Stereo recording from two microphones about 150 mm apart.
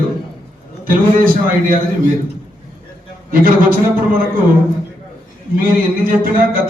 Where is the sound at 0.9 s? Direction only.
70° right (ahead or behind).